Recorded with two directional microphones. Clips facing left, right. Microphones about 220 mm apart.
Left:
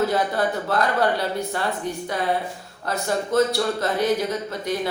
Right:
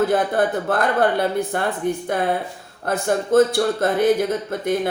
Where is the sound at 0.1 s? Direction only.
50° right (ahead or behind).